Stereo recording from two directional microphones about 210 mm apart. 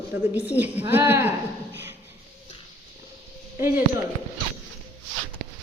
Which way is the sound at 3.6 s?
10° right (ahead or behind).